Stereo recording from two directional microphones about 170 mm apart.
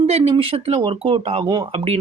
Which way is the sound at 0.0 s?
35° right (ahead or behind).